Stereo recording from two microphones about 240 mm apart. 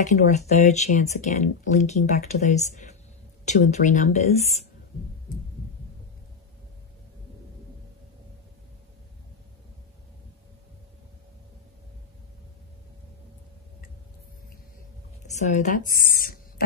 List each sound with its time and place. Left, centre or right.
0.0 s speech: left
15.3 s speech: left